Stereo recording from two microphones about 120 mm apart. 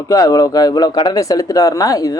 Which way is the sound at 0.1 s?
30° left (ahead or behind).